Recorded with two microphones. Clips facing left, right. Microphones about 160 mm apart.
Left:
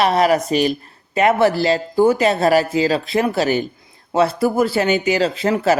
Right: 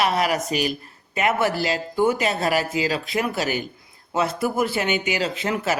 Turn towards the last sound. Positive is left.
turn(degrees=35)  # may be behind; listen again after turning